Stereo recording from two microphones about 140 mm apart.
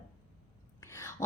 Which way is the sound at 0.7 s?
20° left (ahead or behind).